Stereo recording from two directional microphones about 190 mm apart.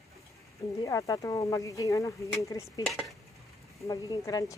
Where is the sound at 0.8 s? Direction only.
20° left (ahead or behind).